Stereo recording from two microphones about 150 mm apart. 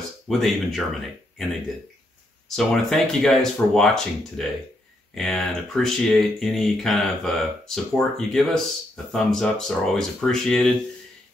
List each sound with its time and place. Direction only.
0.3 s speech: centre (ahead or behind)
2.5 s speech: 5° left (ahead or behind)